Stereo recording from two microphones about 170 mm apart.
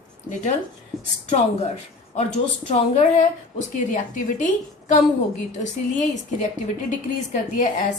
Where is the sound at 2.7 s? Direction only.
45° left (ahead or behind).